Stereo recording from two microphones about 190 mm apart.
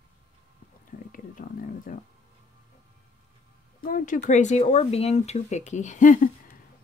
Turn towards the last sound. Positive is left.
turn(degrees=40)  # may be behind; listen again after turning